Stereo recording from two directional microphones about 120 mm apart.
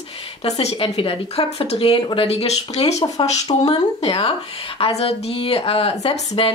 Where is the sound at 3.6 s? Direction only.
60° left (ahead or behind).